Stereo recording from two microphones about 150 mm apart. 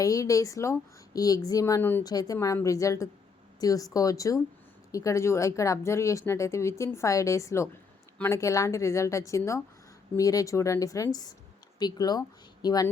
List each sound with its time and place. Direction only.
0.0 s speech: 20° left (ahead or behind)
2.0 s speech: 25° left (ahead or behind)